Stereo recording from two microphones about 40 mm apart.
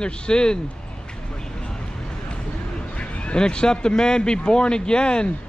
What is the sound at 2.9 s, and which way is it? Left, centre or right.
Speech, left.